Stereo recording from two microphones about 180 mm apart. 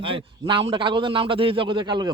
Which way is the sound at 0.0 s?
30° right (ahead or behind).